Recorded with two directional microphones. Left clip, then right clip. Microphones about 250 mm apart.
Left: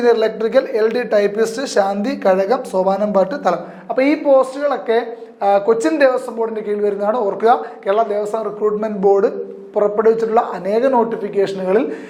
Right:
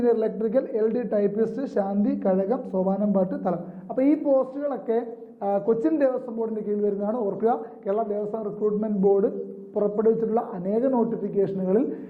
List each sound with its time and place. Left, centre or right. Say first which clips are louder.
0.0 s speech: left 8 dB; centre